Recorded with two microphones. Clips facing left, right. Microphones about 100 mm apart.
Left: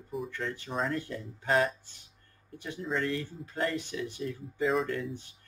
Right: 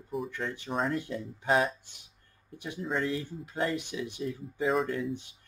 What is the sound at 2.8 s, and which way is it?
Speech, 5° right (ahead or behind).